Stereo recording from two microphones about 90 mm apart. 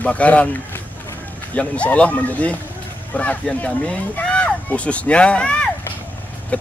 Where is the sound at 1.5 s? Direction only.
15° left (ahead or behind).